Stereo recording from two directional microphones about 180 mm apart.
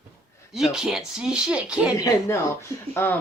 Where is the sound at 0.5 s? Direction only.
Centre (ahead or behind).